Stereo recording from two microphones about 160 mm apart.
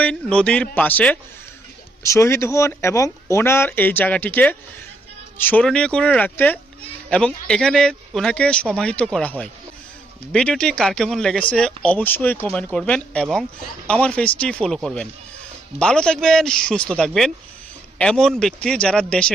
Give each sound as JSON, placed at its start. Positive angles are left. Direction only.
{"t": 0.0, "sound": "speech", "side_deg": 5}
{"t": 15.8, "sound": "speech", "side_deg": 5}